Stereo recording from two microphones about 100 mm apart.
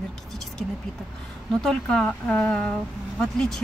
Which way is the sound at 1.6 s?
5° left (ahead or behind).